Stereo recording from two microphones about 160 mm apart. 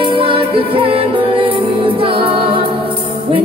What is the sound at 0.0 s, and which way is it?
Music, 35° right (ahead or behind).